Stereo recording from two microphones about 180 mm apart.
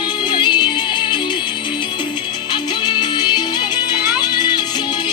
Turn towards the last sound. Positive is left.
turn(degrees=25)  # may be behind; listen again after turning